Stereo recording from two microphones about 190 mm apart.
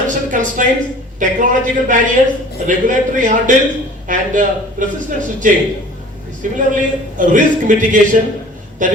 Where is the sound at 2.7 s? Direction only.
45° right (ahead or behind).